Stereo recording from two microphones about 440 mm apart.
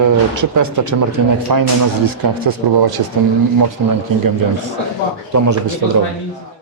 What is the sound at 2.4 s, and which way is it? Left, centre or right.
Speech, right.